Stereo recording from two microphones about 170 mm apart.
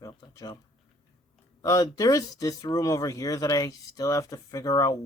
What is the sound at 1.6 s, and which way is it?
Speech, 20° left (ahead or behind).